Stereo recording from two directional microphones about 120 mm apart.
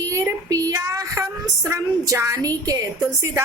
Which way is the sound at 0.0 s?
25° right (ahead or behind).